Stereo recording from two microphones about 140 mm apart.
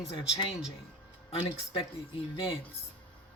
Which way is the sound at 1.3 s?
40° left (ahead or behind).